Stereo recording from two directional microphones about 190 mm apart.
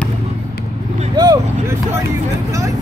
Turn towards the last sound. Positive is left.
turn(degrees=-20)  # may be behind; listen again after turning